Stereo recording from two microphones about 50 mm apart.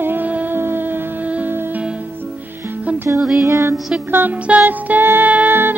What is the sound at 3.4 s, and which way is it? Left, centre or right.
Music, right.